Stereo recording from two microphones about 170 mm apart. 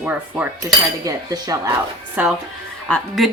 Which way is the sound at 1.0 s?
20° right (ahead or behind).